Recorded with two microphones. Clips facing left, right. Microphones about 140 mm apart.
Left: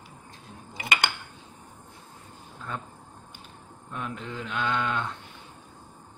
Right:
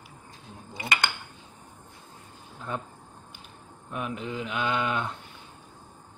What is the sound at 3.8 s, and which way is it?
Speech, 15° right (ahead or behind).